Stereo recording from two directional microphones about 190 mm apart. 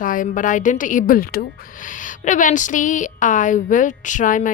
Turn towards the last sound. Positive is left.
turn(degrees=45)  # may be behind; listen again after turning